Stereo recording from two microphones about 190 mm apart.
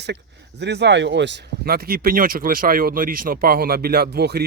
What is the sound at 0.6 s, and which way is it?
Speech, 65° right (ahead or behind).